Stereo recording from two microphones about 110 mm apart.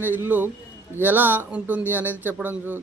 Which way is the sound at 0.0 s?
15° right (ahead or behind).